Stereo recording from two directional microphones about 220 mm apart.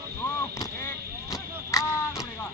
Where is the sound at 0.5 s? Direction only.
15° left (ahead or behind).